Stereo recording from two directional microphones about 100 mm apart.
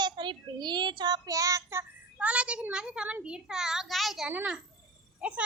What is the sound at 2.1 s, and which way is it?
A child's voice, 10° right (ahead or behind).